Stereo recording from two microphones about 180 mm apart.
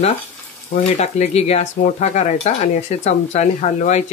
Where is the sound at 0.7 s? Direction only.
40° left (ahead or behind).